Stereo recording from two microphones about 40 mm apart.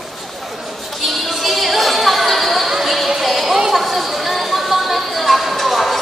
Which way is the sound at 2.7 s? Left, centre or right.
Centre.